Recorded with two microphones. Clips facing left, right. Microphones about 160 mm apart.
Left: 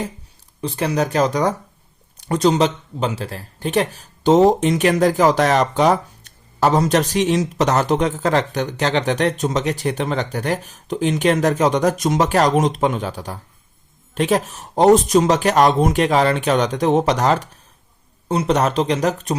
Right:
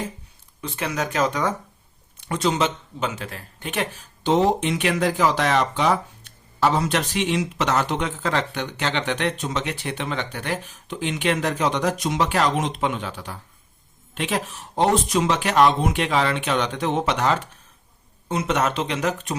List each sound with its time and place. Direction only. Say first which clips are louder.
0.6 s speech: left 7 dB; 35° left (ahead or behind)